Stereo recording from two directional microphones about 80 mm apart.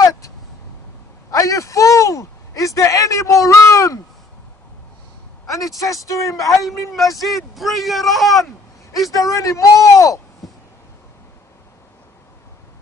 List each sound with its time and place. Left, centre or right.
1.3 s a sound: left
5.5 s speech: left
7.2 s speech: centre
9.1 s speech: left